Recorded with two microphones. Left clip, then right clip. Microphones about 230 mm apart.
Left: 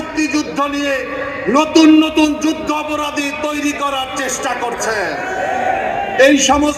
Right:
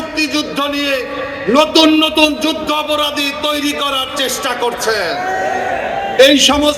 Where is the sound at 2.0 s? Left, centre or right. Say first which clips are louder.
Right 2 dB; right.